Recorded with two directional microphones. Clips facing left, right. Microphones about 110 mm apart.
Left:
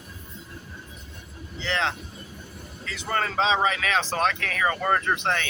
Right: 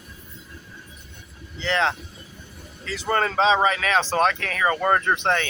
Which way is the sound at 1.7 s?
45° right (ahead or behind).